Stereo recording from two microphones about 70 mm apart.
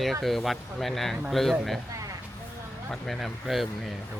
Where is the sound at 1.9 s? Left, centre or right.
Right.